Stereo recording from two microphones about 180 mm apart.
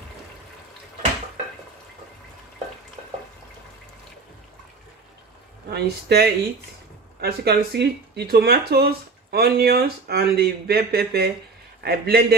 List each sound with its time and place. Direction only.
5.7 s speech: 65° right (ahead or behind)